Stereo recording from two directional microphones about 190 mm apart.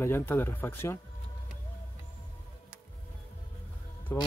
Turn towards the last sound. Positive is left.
turn(degrees=15)  # may be behind; listen again after turning